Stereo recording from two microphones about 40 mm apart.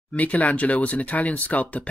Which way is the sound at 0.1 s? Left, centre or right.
Left.